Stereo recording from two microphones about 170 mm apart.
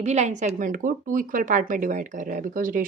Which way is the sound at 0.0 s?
40° right (ahead or behind).